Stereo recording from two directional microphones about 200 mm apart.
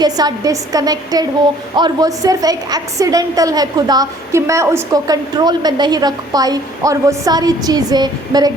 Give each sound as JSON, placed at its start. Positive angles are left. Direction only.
{"t": 0.0, "sound": "a woman's voice", "side_deg": -20}